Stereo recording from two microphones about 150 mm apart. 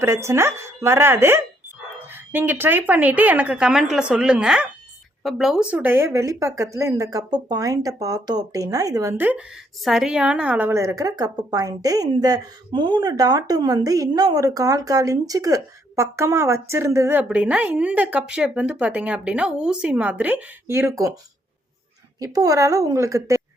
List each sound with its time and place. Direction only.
0.0 s a woman's voice: 20° right (ahead or behind)
22.2 s a woman's voice: 25° right (ahead or behind)